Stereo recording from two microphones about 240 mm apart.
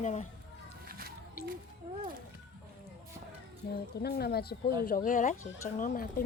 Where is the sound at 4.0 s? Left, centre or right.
Left.